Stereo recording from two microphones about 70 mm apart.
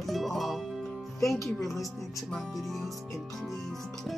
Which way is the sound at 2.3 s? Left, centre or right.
Centre.